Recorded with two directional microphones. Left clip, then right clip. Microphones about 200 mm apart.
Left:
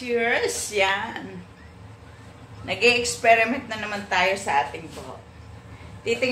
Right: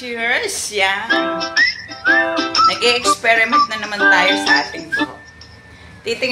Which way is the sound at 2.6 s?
5° right (ahead or behind).